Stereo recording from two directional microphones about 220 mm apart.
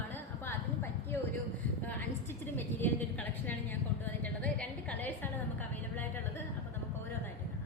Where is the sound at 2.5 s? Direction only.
10° left (ahead or behind).